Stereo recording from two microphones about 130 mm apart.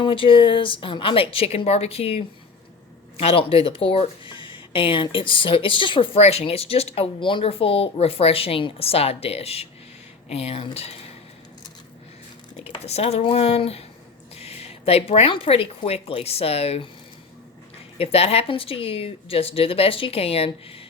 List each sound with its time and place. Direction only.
0.0 s speech: 40° left (ahead or behind)
6.1 s speech: 55° left (ahead or behind)
12.8 s speech: 55° left (ahead or behind)
17.9 s speech: 50° left (ahead or behind)